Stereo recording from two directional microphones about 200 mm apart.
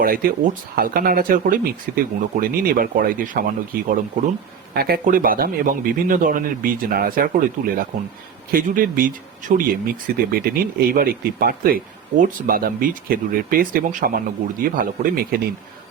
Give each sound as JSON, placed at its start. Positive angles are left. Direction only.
{"t": 0.0, "sound": "speech", "side_deg": -45}